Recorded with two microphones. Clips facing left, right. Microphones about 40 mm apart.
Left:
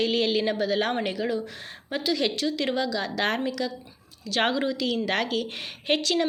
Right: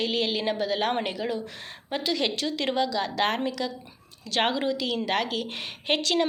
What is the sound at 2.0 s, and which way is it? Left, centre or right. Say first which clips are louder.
Speech: left 2 dB; right.